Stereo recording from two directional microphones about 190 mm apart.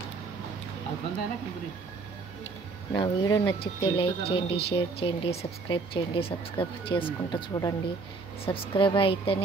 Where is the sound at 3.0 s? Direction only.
20° left (ahead or behind).